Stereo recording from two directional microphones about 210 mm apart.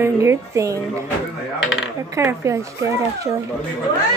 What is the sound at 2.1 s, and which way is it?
Speech, 15° right (ahead or behind).